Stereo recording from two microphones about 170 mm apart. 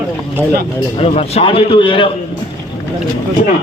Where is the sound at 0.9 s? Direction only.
35° left (ahead or behind).